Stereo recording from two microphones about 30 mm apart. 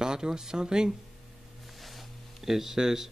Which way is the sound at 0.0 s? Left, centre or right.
Right.